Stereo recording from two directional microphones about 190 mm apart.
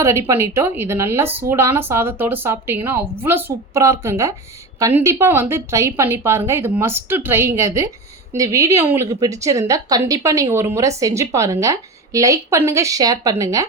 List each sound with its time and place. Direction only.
0.0 s a woman's voice: 15° right (ahead or behind)